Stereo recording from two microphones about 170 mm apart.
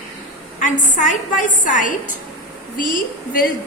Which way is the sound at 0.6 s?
50° left (ahead or behind).